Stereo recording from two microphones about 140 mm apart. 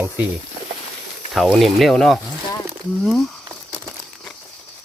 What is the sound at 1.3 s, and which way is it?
Speech, centre (ahead or behind).